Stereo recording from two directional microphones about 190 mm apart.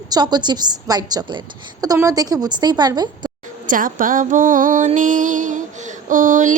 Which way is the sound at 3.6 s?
45° right (ahead or behind).